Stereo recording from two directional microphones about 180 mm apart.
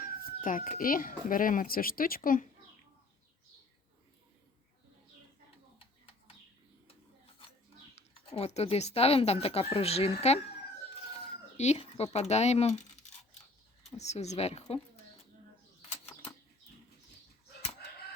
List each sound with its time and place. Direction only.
0.0 s speech: 50° left (ahead or behind)
7.9 s speech: 35° left (ahead or behind)
11.5 s speech: 40° left (ahead or behind)